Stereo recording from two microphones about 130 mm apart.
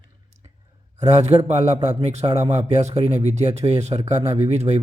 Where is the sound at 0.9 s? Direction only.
60° right (ahead or behind).